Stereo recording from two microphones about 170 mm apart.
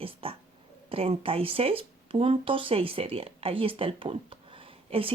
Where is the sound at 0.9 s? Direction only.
35° right (ahead or behind).